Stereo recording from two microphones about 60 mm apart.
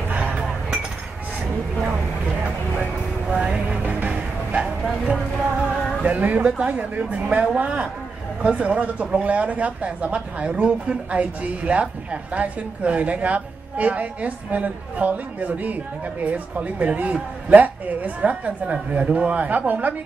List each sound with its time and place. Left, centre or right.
0.1 s chink: centre
3.3 s music: centre
4.6 s bow-wow: centre
6.0 s speech: right